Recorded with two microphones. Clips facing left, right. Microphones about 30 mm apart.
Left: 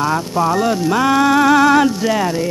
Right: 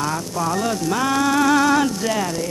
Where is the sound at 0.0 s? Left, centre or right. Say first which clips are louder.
Left 6 dB; left.